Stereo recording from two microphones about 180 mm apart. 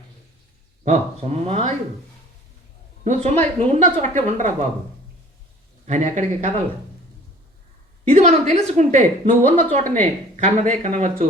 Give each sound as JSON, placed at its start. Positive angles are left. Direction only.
{"t": 0.9, "sound": "speech", "side_deg": -40}
{"t": 3.0, "sound": "speech", "side_deg": -40}
{"t": 5.8, "sound": "speech", "side_deg": -40}
{"t": 8.1, "sound": "speech", "side_deg": -40}